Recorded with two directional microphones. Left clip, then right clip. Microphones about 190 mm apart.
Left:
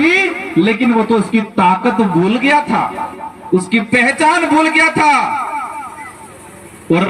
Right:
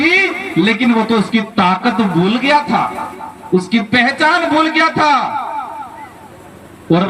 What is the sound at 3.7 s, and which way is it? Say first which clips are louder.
A man's voice: left 1 dB; 25° right (ahead or behind).